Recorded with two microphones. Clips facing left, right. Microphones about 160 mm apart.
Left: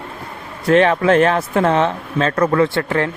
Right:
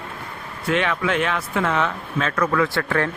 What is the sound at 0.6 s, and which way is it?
Speech, 35° left (ahead or behind).